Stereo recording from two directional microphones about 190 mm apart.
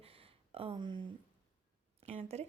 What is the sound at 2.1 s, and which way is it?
Speech, 35° right (ahead or behind).